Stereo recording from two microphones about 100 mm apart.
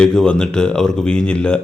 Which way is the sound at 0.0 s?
10° left (ahead or behind).